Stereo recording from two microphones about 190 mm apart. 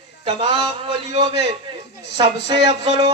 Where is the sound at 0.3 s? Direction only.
30° right (ahead or behind).